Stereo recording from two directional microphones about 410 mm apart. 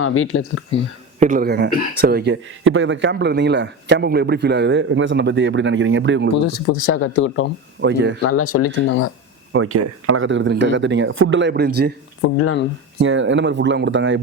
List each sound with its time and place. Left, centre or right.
0.0 s speech: left
1.2 s speech: centre
6.7 s speech: left
7.8 s speech: right
8.2 s speech: left
9.5 s speech: right
12.4 s speech: left
13.0 s speech: right